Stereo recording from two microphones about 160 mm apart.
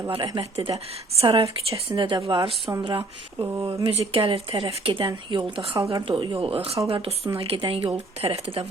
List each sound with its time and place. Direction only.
0.1 s speech: 35° right (ahead or behind)
2.6 s speech: 20° right (ahead or behind)
3.8 s speech: 35° right (ahead or behind)